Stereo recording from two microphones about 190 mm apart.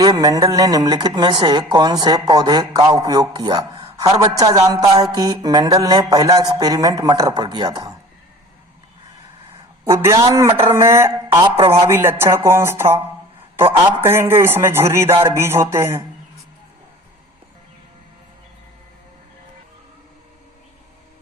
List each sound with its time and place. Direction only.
0.0 s a woman's voice: 20° right (ahead or behind)
9.8 s speech: 15° right (ahead or behind)
14.0 s speech: 10° right (ahead or behind)